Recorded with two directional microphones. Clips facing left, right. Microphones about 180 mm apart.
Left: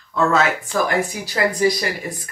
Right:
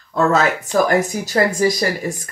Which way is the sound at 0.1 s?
40° right (ahead or behind).